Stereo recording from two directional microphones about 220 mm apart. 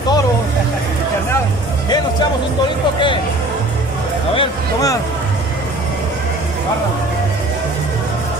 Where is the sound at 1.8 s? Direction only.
20° left (ahead or behind).